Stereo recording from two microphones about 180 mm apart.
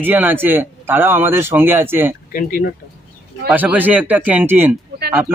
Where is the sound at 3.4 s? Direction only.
10° right (ahead or behind).